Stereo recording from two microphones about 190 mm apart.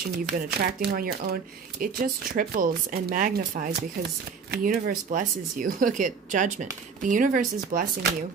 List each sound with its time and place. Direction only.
0.6 s speech: 50° right (ahead or behind)